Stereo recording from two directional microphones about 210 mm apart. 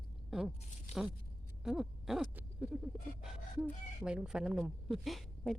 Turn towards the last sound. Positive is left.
turn(degrees=0)  # may be behind; listen again after turning